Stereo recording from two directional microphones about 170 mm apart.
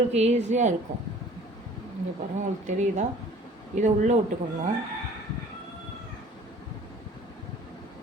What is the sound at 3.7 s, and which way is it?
Speech, 45° right (ahead or behind).